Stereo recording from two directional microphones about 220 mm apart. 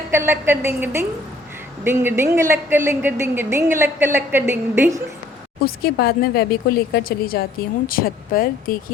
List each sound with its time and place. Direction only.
0.1 s speech: 10° right (ahead or behind)
5.6 s speech: 45° left (ahead or behind)